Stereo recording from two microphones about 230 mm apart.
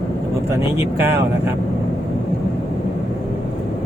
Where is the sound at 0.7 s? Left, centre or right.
Centre.